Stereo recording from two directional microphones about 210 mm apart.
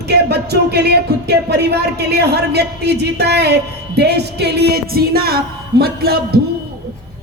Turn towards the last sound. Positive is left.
turn(degrees=-45)  # may be behind; listen again after turning